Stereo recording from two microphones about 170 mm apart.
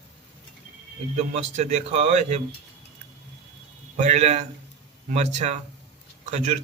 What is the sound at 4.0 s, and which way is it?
A man's voice, 40° right (ahead or behind).